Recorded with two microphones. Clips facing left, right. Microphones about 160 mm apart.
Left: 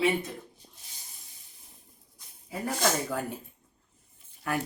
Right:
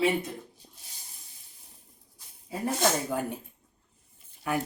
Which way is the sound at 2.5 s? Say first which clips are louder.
Right 2 dB; 20° right (ahead or behind).